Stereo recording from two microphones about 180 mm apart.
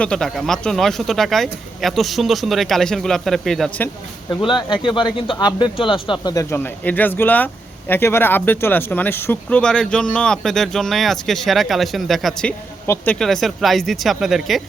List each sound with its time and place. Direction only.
0.0 s speech: 5° left (ahead or behind)
4.3 s speech: 25° left (ahead or behind); by 14.6 s centre (ahead or behind)